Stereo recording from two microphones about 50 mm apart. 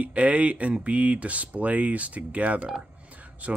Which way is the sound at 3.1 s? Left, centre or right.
Right.